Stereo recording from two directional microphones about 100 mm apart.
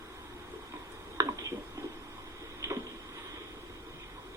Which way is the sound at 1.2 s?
30° right (ahead or behind).